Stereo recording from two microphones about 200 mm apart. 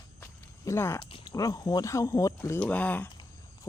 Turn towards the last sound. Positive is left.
turn(degrees=10)  # may be behind; listen again after turning